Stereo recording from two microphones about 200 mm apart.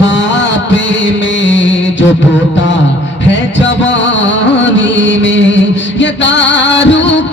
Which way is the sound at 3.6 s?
65° left (ahead or behind).